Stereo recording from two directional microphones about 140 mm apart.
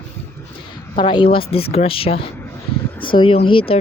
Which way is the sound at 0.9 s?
35° left (ahead or behind).